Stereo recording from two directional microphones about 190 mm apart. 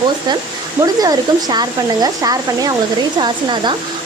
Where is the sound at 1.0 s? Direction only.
20° right (ahead or behind).